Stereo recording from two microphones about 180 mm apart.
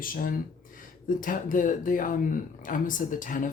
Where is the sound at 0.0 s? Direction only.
50° left (ahead or behind).